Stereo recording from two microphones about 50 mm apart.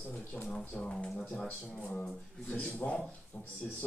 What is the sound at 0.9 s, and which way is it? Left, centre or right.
Speech, centre.